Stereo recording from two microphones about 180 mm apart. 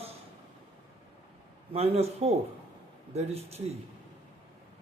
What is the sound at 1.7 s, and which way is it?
A man's voice, 35° right (ahead or behind).